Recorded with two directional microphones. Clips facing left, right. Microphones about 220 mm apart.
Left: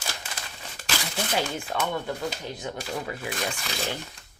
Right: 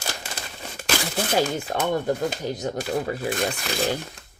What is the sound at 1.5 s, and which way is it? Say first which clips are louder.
Speech: right 5 dB; 45° right (ahead or behind).